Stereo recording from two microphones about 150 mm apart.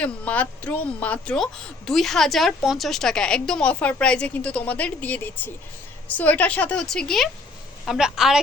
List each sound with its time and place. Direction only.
0.0 s a woman's voice: 10° left (ahead or behind)